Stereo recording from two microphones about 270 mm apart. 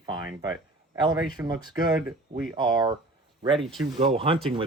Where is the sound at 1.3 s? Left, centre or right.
Centre.